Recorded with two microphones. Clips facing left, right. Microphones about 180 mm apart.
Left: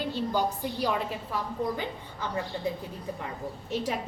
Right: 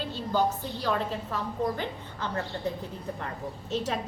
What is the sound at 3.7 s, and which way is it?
Speech, 10° left (ahead or behind).